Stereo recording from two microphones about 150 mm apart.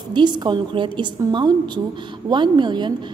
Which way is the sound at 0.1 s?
30° right (ahead or behind).